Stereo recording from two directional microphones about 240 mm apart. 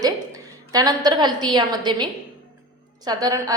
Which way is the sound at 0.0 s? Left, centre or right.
Centre.